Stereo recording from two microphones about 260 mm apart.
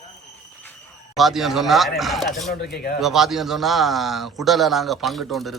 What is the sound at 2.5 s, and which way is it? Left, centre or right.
Speech, left.